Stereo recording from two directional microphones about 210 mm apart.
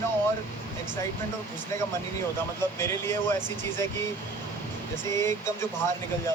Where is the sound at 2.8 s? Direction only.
10° left (ahead or behind).